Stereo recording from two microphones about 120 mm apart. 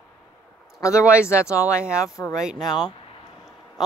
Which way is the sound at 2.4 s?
5° right (ahead or behind).